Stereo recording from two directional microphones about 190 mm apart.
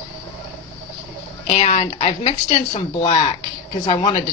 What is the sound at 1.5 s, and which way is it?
A woman's voice, 35° left (ahead or behind).